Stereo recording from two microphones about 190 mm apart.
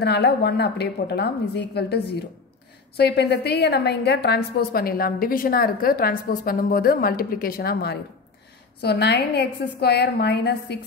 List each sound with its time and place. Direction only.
0.0 s a woman's voice: 60° left (ahead or behind)